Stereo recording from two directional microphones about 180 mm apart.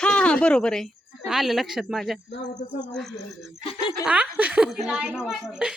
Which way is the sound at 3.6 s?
25° left (ahead or behind).